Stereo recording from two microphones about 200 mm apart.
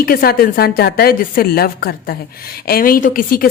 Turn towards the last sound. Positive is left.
turn(degrees=45)  # may be behind; listen again after turning